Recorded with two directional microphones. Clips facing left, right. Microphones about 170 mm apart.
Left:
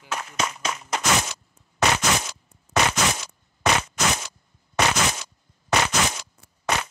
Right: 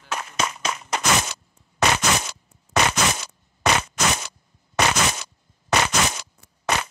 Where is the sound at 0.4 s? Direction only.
75° right (ahead or behind).